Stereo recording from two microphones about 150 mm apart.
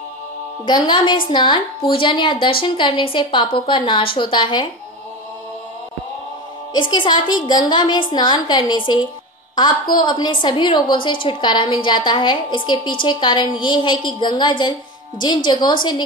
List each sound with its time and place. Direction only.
0.7 s a woman's voice: 30° left (ahead or behind)
6.7 s a woman's voice: 30° left (ahead or behind)